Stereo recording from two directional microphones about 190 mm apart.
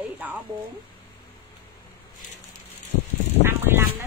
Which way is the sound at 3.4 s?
10° right (ahead or behind).